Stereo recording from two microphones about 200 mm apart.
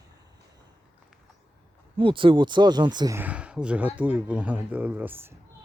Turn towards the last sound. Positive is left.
turn(degrees=-10)  # may be behind; listen again after turning